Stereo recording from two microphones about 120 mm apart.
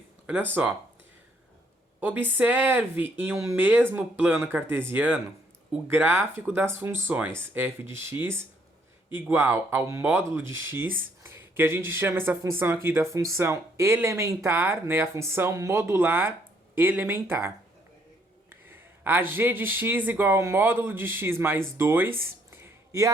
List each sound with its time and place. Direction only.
0.3 s speech: 15° right (ahead or behind)
2.0 s speech: 15° right (ahead or behind)
18.7 s speech: 15° right (ahead or behind)
22.6 s a sound: 25° right (ahead or behind)